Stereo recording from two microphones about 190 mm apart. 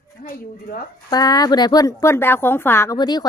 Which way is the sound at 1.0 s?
20° left (ahead or behind).